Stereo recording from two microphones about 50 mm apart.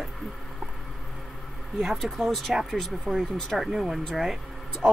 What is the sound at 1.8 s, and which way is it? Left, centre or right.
Speech, centre.